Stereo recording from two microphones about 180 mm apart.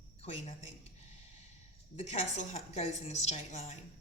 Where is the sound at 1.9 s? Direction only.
35° left (ahead or behind).